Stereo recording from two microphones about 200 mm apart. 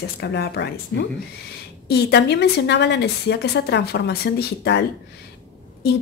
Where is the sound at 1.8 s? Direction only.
55° left (ahead or behind).